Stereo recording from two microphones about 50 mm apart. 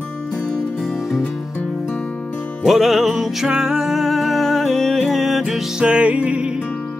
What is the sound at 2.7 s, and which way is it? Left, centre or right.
Music, centre.